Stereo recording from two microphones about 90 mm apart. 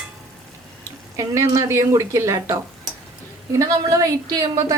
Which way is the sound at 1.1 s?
35° right (ahead or behind).